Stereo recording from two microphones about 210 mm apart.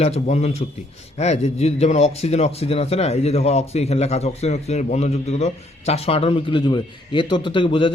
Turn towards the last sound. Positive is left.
turn(degrees=25)  # may be behind; listen again after turning